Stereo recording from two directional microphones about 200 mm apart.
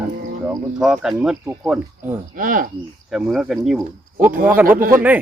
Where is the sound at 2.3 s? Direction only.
45° right (ahead or behind).